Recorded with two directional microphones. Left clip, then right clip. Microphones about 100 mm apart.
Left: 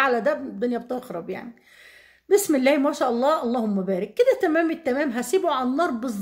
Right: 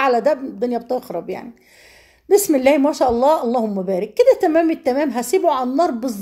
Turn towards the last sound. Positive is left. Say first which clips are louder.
# right 6 dB
turn(degrees=-25)  # may be behind; listen again after turning